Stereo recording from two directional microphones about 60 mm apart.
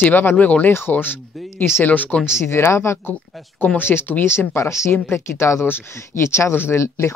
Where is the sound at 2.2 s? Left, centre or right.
Left.